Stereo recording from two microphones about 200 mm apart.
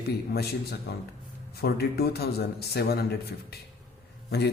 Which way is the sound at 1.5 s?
50° left (ahead or behind).